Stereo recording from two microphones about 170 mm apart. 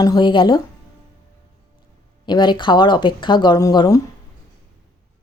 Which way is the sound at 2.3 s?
25° left (ahead or behind).